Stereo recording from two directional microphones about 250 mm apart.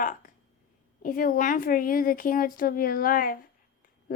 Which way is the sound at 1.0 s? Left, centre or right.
Left.